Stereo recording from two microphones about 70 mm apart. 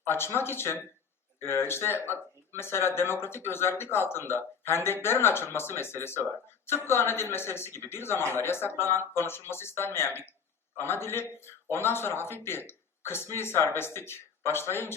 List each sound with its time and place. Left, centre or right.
0.0 s speech: left